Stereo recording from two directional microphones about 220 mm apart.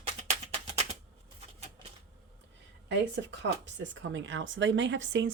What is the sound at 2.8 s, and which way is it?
Speech, 55° right (ahead or behind).